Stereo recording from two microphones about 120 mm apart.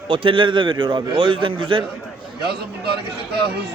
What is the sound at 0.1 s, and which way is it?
A man's voice, 45° right (ahead or behind).